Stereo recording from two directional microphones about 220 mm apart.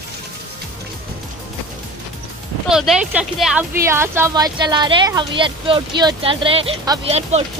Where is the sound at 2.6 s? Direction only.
5° right (ahead or behind); by 7.5 s 30° right (ahead or behind).